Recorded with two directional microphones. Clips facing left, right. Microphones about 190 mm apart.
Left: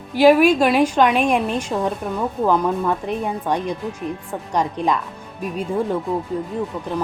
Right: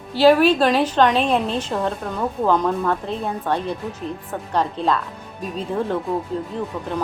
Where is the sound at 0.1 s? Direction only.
15° left (ahead or behind).